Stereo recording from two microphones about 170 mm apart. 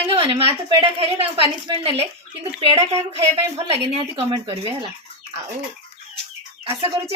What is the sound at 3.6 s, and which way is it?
A woman's voice, 35° right (ahead or behind).